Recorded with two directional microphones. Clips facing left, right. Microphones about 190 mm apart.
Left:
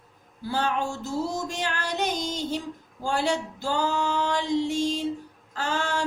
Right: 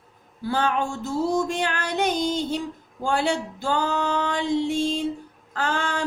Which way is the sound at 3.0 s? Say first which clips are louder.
Right 2 dB; 55° right (ahead or behind).